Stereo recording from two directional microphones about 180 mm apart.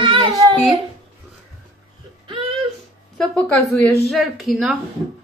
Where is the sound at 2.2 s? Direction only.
30° right (ahead or behind).